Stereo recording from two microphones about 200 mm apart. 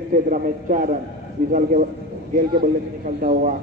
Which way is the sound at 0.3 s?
40° right (ahead or behind).